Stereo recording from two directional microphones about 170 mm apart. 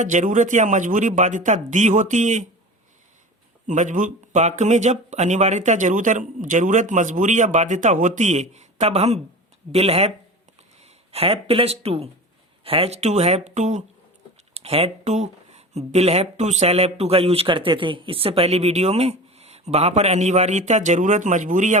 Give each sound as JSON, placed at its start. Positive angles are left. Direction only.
{"t": 0.0, "sound": "speech", "side_deg": -45}
{"t": 3.7, "sound": "speech", "side_deg": -45}